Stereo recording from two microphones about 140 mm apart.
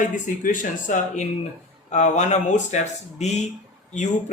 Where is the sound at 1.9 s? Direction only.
55° left (ahead or behind).